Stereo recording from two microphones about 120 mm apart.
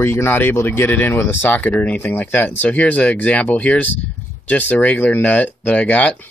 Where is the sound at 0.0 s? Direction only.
20° left (ahead or behind).